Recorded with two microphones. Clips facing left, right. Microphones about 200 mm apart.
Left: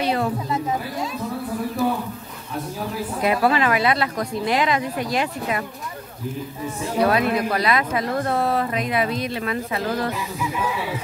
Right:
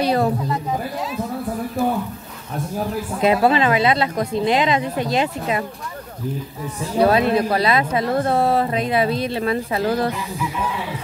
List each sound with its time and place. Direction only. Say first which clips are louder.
0.0 s a sound: right 4 dB; 40° right (ahead or behind)
3.2 s speech: right 3 dB; 25° right (ahead or behind)
7.0 s speech: right 4 dB; 25° right (ahead or behind)